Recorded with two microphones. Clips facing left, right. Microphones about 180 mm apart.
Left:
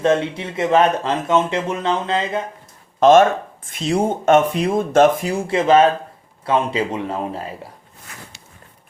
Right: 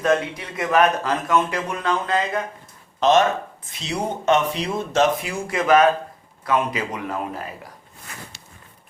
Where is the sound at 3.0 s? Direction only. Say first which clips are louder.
Left 6 dB; 50° left (ahead or behind).